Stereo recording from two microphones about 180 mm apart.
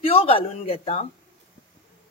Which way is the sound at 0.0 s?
30° left (ahead or behind).